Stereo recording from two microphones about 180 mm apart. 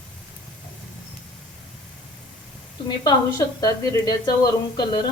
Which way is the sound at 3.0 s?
20° left (ahead or behind).